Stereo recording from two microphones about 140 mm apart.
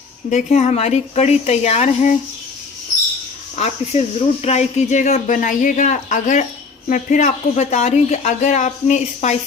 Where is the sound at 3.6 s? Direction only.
50° left (ahead or behind).